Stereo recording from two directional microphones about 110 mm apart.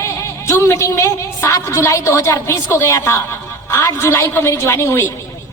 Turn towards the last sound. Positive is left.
turn(degrees=25)  # may be behind; listen again after turning